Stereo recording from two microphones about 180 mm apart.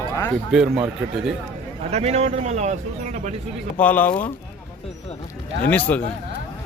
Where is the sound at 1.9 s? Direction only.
35° right (ahead or behind).